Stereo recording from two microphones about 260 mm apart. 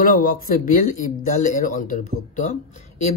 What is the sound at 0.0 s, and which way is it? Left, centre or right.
Speech, left.